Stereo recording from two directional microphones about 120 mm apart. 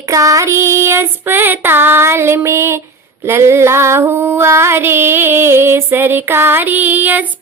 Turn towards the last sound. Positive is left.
turn(degrees=-15)  # may be behind; listen again after turning